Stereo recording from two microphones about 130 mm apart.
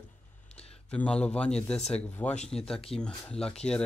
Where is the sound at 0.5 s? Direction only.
50° left (ahead or behind).